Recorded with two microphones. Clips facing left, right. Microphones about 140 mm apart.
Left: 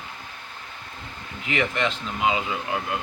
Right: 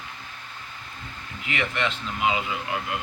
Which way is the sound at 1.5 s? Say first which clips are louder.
Left 3 dB; 35° left (ahead or behind).